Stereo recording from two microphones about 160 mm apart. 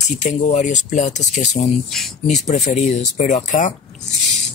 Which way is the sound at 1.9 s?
Centre (ahead or behind).